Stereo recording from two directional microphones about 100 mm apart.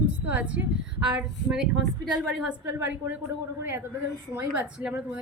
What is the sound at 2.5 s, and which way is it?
Speech, 20° right (ahead or behind).